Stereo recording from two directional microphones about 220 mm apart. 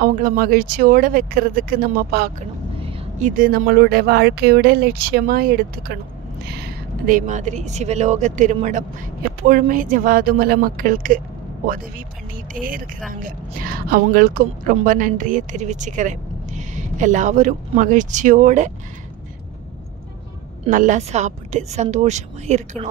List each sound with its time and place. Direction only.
0.0 s speech: 40° right (ahead or behind)
2.8 s speech: 35° right (ahead or behind)
13.1 s speech: 40° right (ahead or behind)
20.6 s speech: 35° right (ahead or behind)